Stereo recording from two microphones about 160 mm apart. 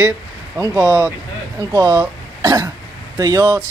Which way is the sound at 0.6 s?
20° right (ahead or behind).